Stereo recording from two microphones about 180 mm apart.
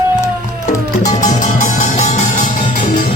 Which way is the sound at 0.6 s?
45° left (ahead or behind).